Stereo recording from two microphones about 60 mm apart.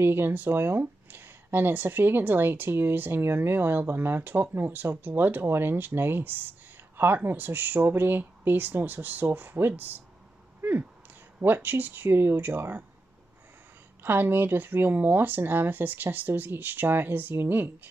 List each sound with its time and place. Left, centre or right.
0.0 s speech: right
10.6 s a sound: right
11.3 s speech: right
14.0 s speech: right